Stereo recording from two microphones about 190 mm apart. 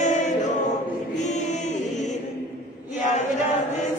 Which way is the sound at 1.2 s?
40° left (ahead or behind).